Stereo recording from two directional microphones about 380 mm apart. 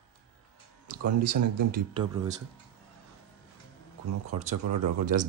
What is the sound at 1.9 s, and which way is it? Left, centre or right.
Speech, centre.